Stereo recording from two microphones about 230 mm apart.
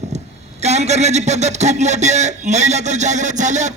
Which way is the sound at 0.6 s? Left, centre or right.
Right.